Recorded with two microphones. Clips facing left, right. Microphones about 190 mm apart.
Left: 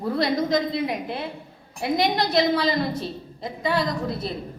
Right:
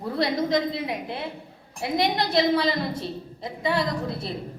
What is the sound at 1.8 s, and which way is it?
A woman's voice, 25° right (ahead or behind).